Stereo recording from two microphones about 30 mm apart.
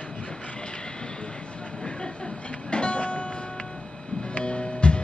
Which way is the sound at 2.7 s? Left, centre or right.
Left.